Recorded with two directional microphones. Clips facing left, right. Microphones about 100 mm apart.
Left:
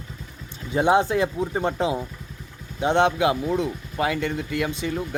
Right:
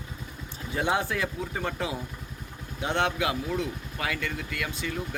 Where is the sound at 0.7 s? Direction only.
20° left (ahead or behind).